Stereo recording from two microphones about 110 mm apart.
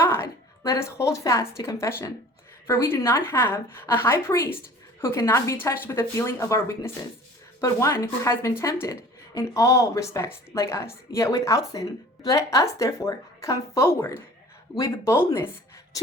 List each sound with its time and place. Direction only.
0.0 s a woman's voice: 25° left (ahead or behind)